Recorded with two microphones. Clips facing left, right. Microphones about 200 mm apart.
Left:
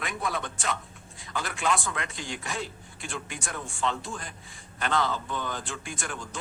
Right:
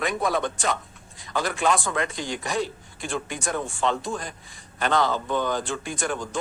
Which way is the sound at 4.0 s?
40° right (ahead or behind).